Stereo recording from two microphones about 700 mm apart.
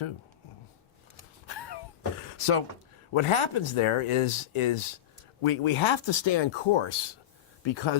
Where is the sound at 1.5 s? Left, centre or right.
Left.